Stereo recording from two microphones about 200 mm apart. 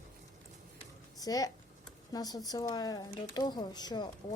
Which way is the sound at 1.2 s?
20° left (ahead or behind).